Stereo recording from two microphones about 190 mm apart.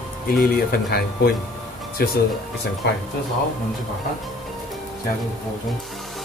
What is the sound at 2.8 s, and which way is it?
Speech, 65° left (ahead or behind).